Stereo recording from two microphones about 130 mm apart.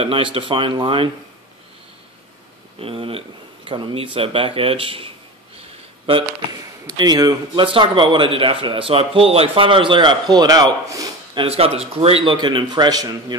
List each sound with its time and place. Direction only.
0.0 s speech: 45° right (ahead or behind)
2.8 s speech: 45° right (ahead or behind)
5.6 s a sound: 45° right (ahead or behind)
7.0 s a man's voice: 30° right (ahead or behind)
11.3 s a man's voice: 50° right (ahead or behind); by 13.4 s 30° right (ahead or behind)